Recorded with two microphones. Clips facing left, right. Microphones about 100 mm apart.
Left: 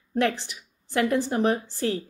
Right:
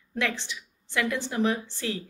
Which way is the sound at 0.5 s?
35° left (ahead or behind).